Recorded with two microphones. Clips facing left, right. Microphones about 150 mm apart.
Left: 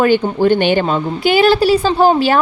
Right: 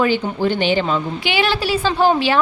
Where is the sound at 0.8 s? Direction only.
40° left (ahead or behind).